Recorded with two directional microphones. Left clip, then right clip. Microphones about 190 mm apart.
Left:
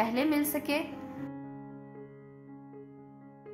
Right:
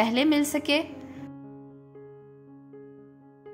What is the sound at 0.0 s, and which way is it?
Speech, 25° right (ahead or behind).